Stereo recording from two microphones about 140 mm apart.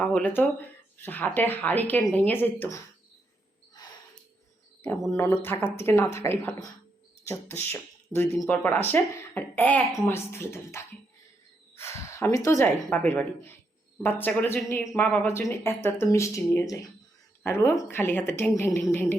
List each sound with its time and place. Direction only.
0.0 s speech: 10° left (ahead or behind)
5.1 s speech: 20° left (ahead or behind)